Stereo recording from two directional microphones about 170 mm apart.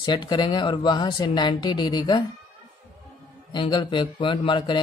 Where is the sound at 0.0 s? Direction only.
25° left (ahead or behind).